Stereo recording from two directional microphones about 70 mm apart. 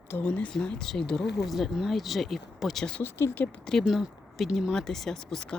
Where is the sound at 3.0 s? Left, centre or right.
Left.